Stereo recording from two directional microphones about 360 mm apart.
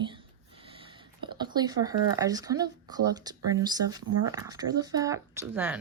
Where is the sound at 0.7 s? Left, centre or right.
Centre.